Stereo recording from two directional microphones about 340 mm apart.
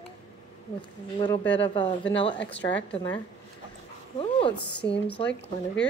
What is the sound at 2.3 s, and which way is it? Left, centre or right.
Speech, left.